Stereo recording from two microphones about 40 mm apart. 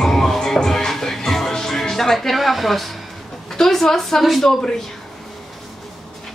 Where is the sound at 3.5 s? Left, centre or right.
Centre.